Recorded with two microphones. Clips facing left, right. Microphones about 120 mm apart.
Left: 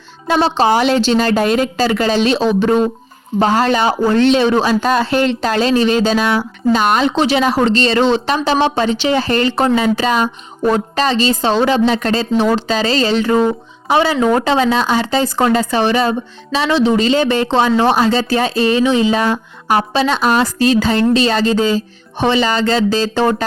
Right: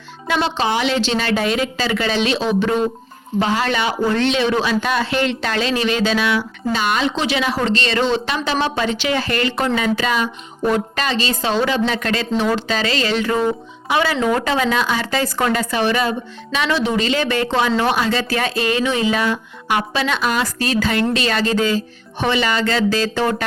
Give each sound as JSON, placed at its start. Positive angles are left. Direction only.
{"t": 0.3, "sound": "speech", "side_deg": 35}